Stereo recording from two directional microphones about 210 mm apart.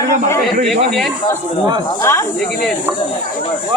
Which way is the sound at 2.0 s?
10° left (ahead or behind).